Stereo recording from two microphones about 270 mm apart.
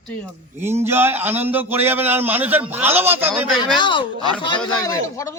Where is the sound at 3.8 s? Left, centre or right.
Centre.